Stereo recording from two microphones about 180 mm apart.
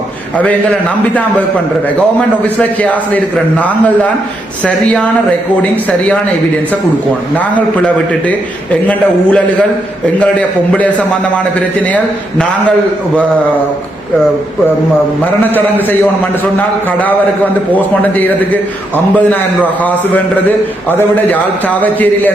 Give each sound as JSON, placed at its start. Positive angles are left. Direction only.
{"t": 0.3, "sound": "a man's voice", "side_deg": 10}
{"t": 2.6, "sound": "a man's voice", "side_deg": 10}
{"t": 7.3, "sound": "a man's voice", "side_deg": 10}
{"t": 8.9, "sound": "a man's voice", "side_deg": 5}
{"t": 10.7, "sound": "a man's voice", "side_deg": 10}
{"t": 18.9, "sound": "a man's voice", "side_deg": 10}